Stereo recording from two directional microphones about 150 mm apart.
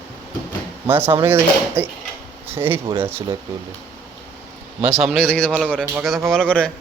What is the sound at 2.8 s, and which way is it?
Speech, 35° right (ahead or behind).